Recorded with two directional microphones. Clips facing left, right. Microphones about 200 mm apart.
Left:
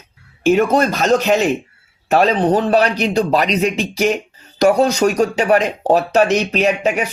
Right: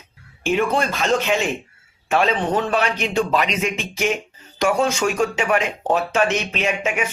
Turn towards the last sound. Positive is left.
turn(degrees=35)  # may be behind; listen again after turning